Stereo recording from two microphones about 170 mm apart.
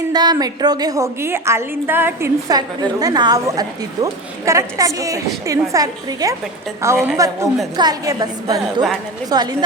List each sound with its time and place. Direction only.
0.1 s a woman's voice: 25° right (ahead or behind)
8.5 s a woman's voice: centre (ahead or behind)
9.3 s a woman's voice: 25° right (ahead or behind)